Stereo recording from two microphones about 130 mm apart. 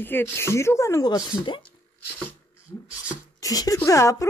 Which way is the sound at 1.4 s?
40° left (ahead or behind).